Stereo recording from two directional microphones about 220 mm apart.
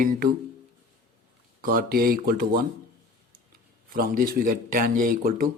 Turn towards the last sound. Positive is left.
turn(degrees=-40)  # may be behind; listen again after turning